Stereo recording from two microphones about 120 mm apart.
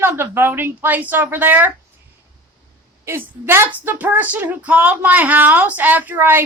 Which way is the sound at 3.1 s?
20° right (ahead or behind).